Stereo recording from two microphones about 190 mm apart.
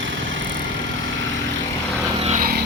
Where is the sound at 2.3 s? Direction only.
45° right (ahead or behind).